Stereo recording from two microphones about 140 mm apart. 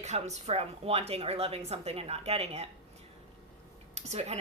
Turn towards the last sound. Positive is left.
turn(degrees=-50)  # may be behind; listen again after turning